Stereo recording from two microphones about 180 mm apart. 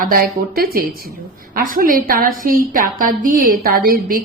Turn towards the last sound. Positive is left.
turn(degrees=-50)  # may be behind; listen again after turning